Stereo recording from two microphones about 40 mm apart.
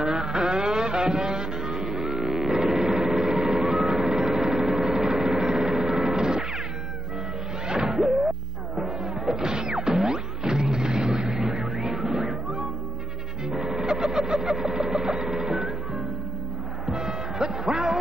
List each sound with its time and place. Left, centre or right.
0.0 s music: centre
3.3 s vehicle: centre
5.1 s a sound: centre
7.6 s music: centre
11.1 s car alarm: centre
11.8 s music: centre
13.5 s vehicle: centre
16.8 s music: centre